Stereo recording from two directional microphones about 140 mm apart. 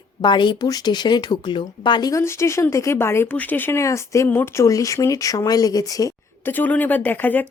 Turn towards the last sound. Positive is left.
turn(degrees=15)  # may be behind; listen again after turning